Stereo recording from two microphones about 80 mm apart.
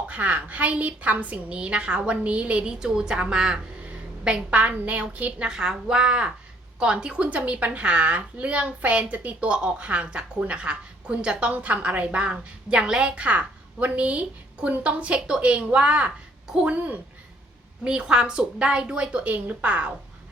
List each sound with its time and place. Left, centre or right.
0.1 s a woman's voice: centre